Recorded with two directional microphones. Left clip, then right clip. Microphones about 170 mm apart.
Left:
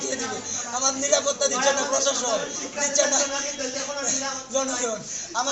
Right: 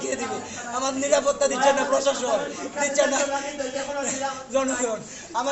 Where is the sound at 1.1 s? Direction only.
25° right (ahead or behind).